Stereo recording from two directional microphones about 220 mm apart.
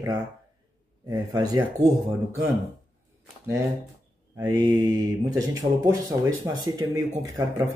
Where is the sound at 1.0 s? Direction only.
20° right (ahead or behind).